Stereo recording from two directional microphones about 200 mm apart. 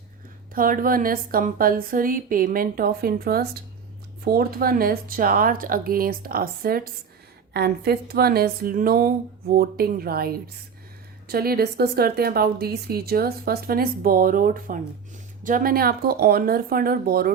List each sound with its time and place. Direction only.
0.5 s a woman's voice: 45° right (ahead or behind)